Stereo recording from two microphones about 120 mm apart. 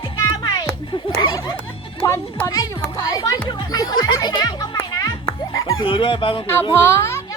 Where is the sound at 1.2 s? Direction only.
35° left (ahead or behind).